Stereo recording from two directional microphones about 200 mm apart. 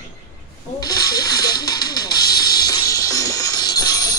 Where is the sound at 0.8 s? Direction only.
20° left (ahead or behind).